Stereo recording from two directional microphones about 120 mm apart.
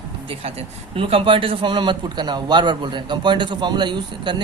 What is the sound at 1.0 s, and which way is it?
A man's voice, 45° right (ahead or behind).